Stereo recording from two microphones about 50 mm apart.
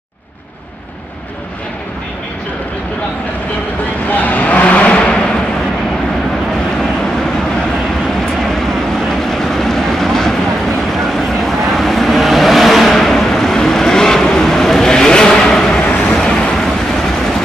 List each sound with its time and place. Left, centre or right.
4.2 s vehicle: left
9.1 s vehicle: centre